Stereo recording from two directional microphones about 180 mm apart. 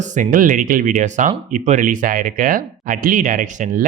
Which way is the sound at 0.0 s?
45° right (ahead or behind).